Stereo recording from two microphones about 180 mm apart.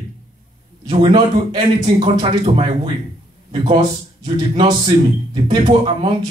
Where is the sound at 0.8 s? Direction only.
30° right (ahead or behind).